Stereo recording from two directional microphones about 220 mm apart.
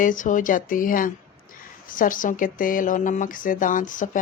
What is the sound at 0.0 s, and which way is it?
Speech, 35° left (ahead or behind).